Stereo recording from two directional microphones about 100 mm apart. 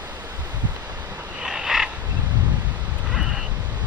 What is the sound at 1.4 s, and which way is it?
Frog, 5° right (ahead or behind).